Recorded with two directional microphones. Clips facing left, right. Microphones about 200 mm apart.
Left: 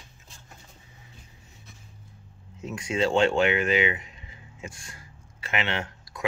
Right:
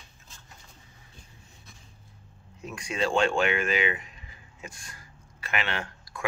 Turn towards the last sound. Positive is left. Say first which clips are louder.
# left 2 dB
turn(degrees=20)  # may be behind; listen again after turning